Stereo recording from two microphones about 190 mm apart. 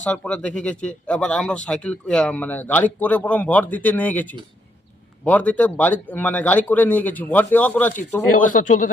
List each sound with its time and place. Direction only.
0.0 s speech: 5° left (ahead or behind)
8.4 s speech: 45° left (ahead or behind)